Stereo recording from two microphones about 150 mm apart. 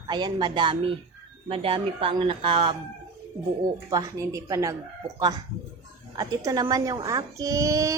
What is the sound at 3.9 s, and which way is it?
Speech, 20° right (ahead or behind).